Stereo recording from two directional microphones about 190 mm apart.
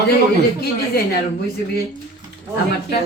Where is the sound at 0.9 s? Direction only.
55° left (ahead or behind).